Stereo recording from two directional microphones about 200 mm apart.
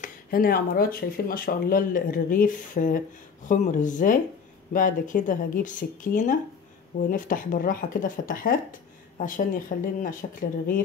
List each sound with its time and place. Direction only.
0.0 s speech: 45° left (ahead or behind)